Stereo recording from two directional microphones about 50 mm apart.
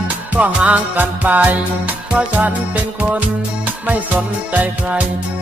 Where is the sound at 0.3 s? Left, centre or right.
Right.